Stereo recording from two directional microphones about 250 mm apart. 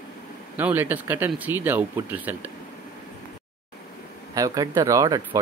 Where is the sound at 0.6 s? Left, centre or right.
Centre.